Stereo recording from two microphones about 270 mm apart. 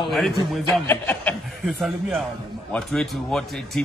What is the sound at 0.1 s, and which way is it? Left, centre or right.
A man's voice, centre.